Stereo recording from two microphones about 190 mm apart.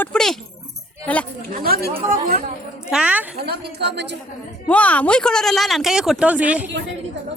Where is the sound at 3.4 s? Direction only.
60° right (ahead or behind).